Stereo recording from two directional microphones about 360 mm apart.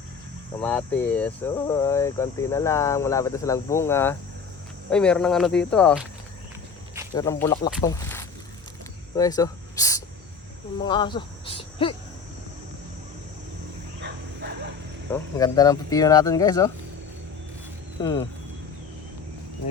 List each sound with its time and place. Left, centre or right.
0.6 s speech: centre
7.1 s speech: centre
7.9 s a sound: centre
9.1 s speech: centre
14.0 s wild animals: right
15.1 s speech: centre
18.0 s speech: centre